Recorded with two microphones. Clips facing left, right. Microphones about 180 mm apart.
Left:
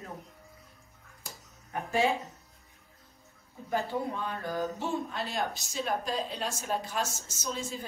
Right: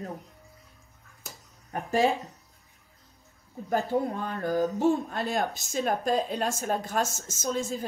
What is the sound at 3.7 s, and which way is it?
Speech, 45° right (ahead or behind).